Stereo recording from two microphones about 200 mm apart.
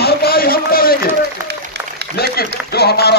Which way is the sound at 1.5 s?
55° right (ahead or behind).